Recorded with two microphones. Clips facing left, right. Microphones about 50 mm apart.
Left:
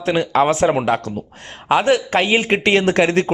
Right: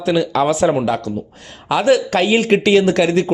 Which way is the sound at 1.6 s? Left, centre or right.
Left.